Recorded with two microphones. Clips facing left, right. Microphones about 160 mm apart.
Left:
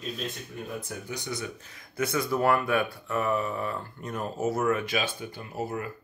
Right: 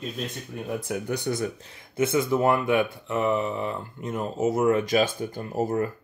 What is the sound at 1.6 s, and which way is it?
Speech, 30° right (ahead or behind).